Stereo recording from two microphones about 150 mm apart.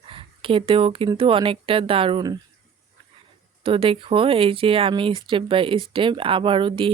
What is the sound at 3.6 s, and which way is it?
Speech, 35° right (ahead or behind).